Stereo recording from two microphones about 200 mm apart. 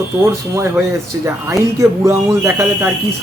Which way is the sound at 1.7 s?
15° right (ahead or behind).